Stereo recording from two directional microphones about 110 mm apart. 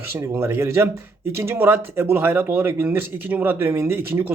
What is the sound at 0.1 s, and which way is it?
Speech, 20° right (ahead or behind).